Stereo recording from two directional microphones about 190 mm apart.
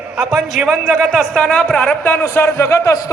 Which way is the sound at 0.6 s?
Centre (ahead or behind).